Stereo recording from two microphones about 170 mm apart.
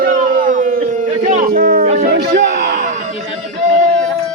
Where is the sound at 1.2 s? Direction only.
55° right (ahead or behind).